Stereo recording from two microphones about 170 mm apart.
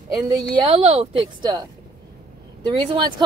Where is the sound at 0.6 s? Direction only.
35° right (ahead or behind).